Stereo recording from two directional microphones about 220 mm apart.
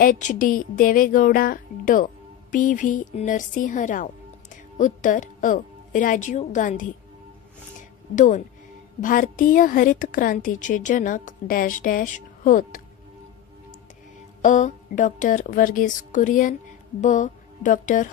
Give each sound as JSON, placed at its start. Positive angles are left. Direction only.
{"t": 0.0, "sound": "a woman's voice", "side_deg": 35}
{"t": 9.0, "sound": "a woman's voice", "side_deg": 35}
{"t": 14.4, "sound": "a woman's voice", "side_deg": 35}
{"t": 17.0, "sound": "music", "side_deg": 35}